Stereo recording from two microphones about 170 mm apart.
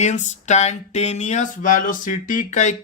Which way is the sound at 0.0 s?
45° left (ahead or behind).